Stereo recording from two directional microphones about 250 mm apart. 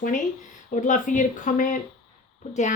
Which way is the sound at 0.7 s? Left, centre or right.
Left.